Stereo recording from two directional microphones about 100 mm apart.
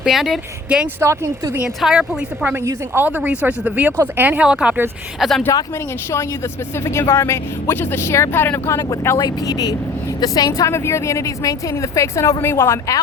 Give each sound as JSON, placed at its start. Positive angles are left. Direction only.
{"t": 0.0, "sound": "speech", "side_deg": -5}
{"t": 0.9, "sound": "speech", "side_deg": -25}
{"t": 1.6, "sound": "speech", "side_deg": -5}
{"t": 5.5, "sound": "speech", "side_deg": 30}
{"t": 6.8, "sound": "a woman's voice", "side_deg": 25}
{"t": 8.9, "sound": "a woman's voice", "side_deg": 35}